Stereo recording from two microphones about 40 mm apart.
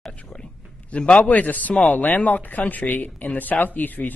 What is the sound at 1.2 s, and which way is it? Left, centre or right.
A man's voice, left.